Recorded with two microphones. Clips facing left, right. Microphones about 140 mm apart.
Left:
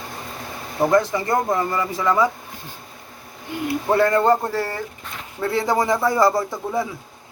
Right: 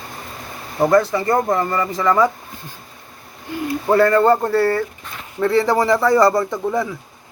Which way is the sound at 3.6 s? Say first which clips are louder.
Right 3 dB; 10° left (ahead or behind).